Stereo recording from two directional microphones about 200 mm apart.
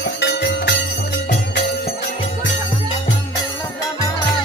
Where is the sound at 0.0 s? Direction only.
55° left (ahead or behind).